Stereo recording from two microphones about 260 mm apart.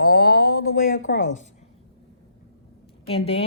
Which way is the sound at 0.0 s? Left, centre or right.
Left.